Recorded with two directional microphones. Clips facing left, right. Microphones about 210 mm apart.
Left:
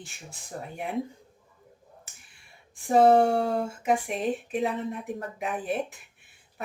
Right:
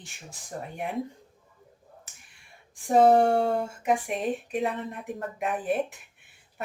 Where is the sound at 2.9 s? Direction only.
Centre (ahead or behind).